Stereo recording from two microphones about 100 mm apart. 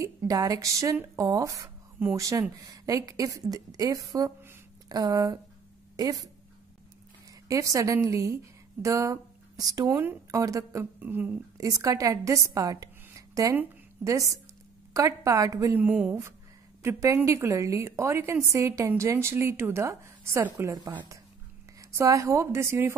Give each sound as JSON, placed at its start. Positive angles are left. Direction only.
{"t": 0.0, "sound": "a woman's voice", "side_deg": -35}
{"t": 7.4, "sound": "a woman's voice", "side_deg": -35}
{"t": 11.0, "sound": "a woman's voice", "side_deg": -20}
{"t": 11.5, "sound": "a woman's voice", "side_deg": -35}
{"t": 15.8, "sound": "speech", "side_deg": -15}
{"t": 16.8, "sound": "a woman's voice", "side_deg": -30}